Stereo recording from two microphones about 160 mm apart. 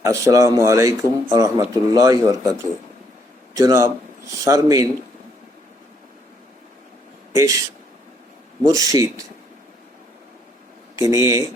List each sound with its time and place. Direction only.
0.0 s speech: 20° right (ahead or behind)
3.5 s speech: 20° right (ahead or behind)
7.3 s speech: 20° right (ahead or behind)
8.6 s speech: 20° right (ahead or behind)
10.9 s speech: 20° right (ahead or behind)